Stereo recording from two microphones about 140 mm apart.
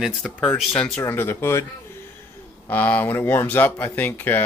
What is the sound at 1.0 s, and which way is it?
Speech, 15° left (ahead or behind).